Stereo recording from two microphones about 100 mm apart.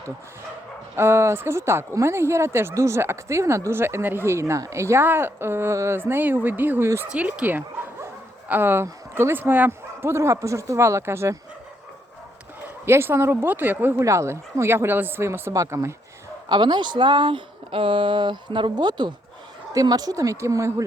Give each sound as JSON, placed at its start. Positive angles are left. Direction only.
{"t": 0.9, "sound": "speech", "side_deg": -25}
{"t": 7.1, "sound": "speech", "side_deg": -10}
{"t": 12.6, "sound": "speech", "side_deg": -25}
{"t": 14.0, "sound": "speech", "side_deg": -30}
{"t": 16.5, "sound": "a woman's voice", "side_deg": -50}